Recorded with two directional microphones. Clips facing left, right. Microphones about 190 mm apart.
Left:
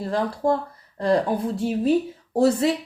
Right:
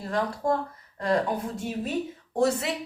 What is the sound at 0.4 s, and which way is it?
Speech, 30° left (ahead or behind).